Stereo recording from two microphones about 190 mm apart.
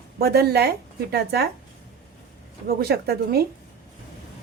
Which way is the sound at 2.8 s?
55° right (ahead or behind).